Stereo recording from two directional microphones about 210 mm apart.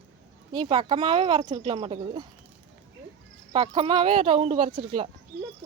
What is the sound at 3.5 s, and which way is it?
Speech, 25° right (ahead or behind).